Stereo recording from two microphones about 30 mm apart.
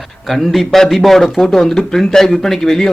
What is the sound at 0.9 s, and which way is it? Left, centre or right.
A man's voice, centre.